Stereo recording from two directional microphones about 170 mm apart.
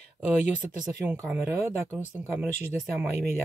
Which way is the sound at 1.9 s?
10° right (ahead or behind).